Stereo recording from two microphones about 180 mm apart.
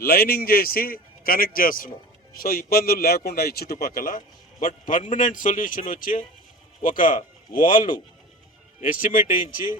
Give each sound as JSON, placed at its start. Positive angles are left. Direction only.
{"t": 0.0, "sound": "a man's voice", "side_deg": 60}